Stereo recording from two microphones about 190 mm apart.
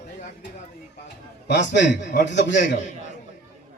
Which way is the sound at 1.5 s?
70° left (ahead or behind).